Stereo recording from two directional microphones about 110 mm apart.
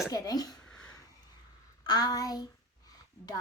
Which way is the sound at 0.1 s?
35° left (ahead or behind).